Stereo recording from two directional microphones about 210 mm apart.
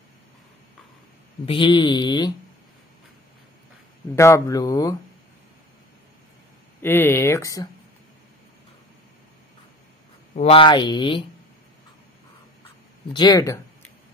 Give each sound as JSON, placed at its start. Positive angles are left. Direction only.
{"t": 1.4, "sound": "speech", "side_deg": 25}
{"t": 4.1, "sound": "speech", "side_deg": 15}
{"t": 6.8, "sound": "speech", "side_deg": 10}
{"t": 10.3, "sound": "speech", "side_deg": 25}
{"t": 13.1, "sound": "speech", "side_deg": 20}